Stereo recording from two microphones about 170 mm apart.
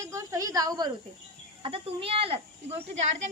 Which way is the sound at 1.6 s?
35° right (ahead or behind).